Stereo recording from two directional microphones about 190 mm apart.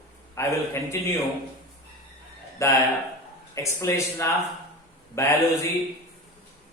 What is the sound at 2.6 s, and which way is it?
A man's voice, 15° left (ahead or behind).